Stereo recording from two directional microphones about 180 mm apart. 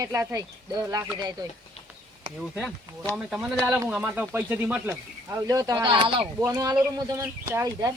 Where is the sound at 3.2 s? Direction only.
Centre (ahead or behind).